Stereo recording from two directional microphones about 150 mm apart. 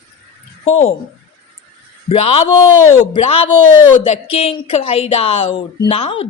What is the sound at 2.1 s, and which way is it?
Speech, 40° left (ahead or behind).